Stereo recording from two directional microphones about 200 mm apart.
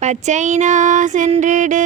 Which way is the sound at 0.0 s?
35° right (ahead or behind).